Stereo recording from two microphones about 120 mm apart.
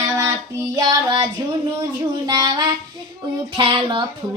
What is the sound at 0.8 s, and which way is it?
Child singing, 35° right (ahead or behind).